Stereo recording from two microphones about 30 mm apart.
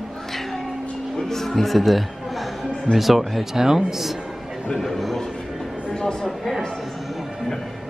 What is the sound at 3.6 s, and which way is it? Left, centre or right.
Speech, centre.